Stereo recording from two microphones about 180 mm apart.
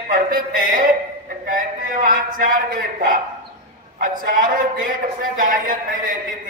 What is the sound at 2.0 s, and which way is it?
Speech, 50° right (ahead or behind).